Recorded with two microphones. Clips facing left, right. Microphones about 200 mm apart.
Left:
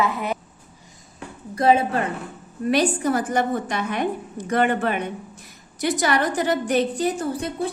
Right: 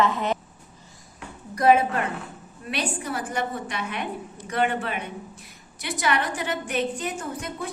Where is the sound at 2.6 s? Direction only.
45° left (ahead or behind).